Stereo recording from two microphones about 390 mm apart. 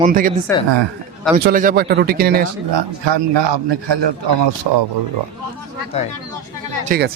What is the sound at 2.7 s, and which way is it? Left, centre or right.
A man's voice, right.